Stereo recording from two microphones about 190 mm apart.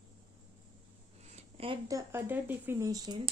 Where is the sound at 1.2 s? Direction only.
30° right (ahead or behind).